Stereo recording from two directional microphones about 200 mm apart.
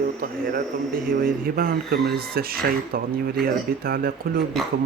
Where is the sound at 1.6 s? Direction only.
50° right (ahead or behind).